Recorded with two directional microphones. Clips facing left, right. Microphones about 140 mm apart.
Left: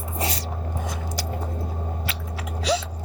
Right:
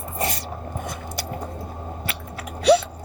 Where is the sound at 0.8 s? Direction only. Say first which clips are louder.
Left 1 dB; 60° right (ahead or behind).